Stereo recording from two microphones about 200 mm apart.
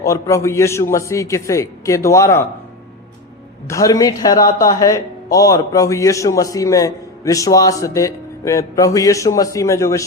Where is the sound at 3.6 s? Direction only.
15° left (ahead or behind).